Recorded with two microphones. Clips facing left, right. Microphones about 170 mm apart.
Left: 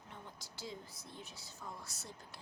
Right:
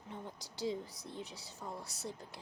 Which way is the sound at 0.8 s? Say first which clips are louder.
Right 6 dB; 35° right (ahead or behind).